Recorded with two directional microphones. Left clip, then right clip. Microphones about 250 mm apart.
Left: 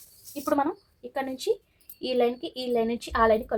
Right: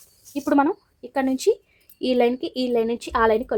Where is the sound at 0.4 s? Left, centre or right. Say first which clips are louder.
Right 6 dB; right.